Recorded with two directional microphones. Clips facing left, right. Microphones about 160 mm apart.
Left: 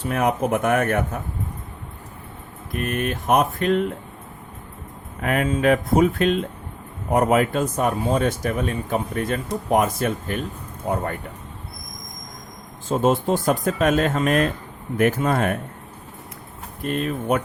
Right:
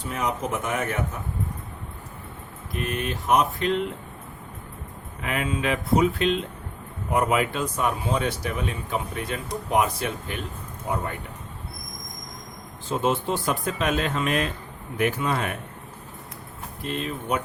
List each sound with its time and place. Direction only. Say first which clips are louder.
0.0 s speech: left 6 dB; 60° left (ahead or behind)
2.7 s speech: left 4 dB; 55° left (ahead or behind)
5.2 s speech: left 7 dB; 45° left (ahead or behind)
12.9 s speech: left 5 dB; 45° left (ahead or behind)
16.8 s speech: left 6 dB; 50° left (ahead or behind)